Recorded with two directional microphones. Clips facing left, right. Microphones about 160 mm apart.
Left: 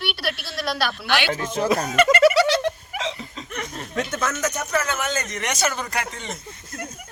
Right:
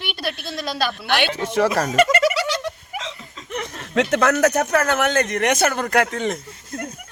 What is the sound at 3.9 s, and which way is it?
Speech, 75° right (ahead or behind).